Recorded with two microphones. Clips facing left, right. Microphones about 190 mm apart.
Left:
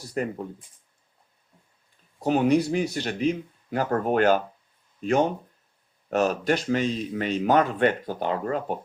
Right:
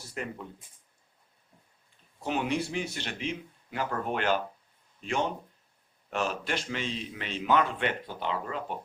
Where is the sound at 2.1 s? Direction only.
40° left (ahead or behind).